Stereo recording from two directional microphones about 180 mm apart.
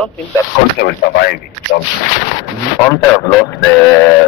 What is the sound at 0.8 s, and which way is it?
Speech, 65° left (ahead or behind).